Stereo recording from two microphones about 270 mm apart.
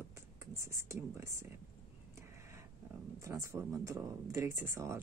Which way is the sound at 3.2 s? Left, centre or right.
Centre.